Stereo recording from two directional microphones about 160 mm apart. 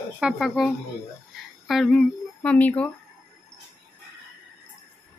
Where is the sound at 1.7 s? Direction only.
Centre (ahead or behind).